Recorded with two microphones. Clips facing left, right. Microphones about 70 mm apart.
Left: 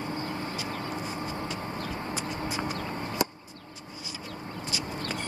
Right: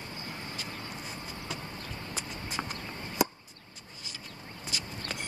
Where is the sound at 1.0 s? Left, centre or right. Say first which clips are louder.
Left 8 dB; centre.